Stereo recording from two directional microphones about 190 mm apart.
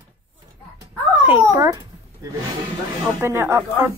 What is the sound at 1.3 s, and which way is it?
Speech, 10° right (ahead or behind).